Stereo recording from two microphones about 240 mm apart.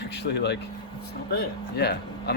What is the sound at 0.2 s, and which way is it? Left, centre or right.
Speech, left.